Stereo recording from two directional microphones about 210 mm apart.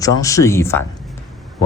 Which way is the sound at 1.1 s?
Centre (ahead or behind).